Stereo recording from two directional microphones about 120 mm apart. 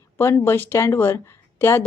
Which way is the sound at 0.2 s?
20° left (ahead or behind).